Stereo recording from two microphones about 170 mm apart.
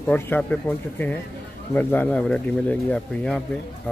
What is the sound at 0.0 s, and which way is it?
Speech, 10° left (ahead or behind).